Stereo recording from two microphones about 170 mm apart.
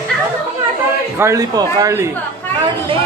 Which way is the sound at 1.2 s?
20° right (ahead or behind).